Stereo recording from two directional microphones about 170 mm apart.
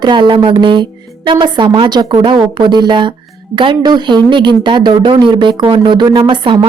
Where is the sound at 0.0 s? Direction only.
25° right (ahead or behind).